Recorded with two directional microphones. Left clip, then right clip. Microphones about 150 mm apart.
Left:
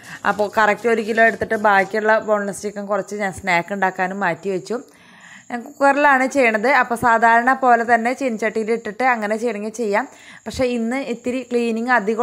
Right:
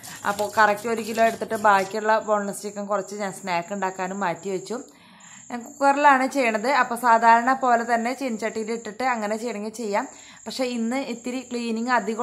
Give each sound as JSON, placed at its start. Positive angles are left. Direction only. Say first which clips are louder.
{"t": 0.2, "sound": "a woman's voice", "louder": "left 3 dB", "side_deg": 30}